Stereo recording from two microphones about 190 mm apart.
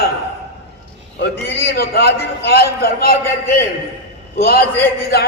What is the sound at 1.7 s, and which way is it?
A man's voice, 55° left (ahead or behind).